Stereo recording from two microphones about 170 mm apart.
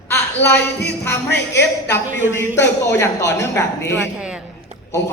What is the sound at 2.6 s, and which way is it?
Speech, 15° left (ahead or behind).